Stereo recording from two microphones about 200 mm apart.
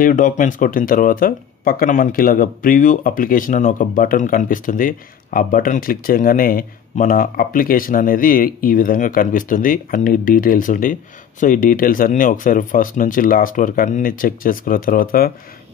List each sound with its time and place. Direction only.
0.0 s speech: 40° left (ahead or behind)